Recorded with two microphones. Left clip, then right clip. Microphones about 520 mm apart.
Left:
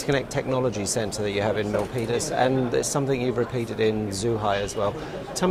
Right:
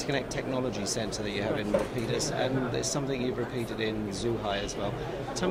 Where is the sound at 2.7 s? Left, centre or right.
Left.